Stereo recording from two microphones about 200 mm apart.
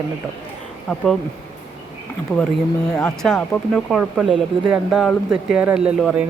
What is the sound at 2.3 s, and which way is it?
Speech, 10° left (ahead or behind).